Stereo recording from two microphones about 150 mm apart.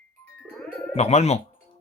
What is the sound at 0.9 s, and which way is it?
Speech, 45° left (ahead or behind).